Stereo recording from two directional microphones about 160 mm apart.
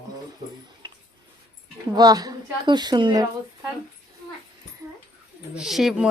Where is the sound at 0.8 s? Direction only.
30° right (ahead or behind).